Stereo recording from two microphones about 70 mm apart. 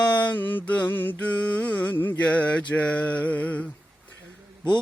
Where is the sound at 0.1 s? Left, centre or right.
Left.